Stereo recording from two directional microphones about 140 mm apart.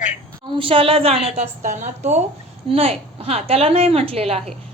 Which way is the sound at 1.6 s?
60° right (ahead or behind).